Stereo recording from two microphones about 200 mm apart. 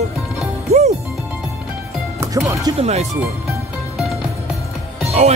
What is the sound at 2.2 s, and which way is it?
Speech, 15° right (ahead or behind).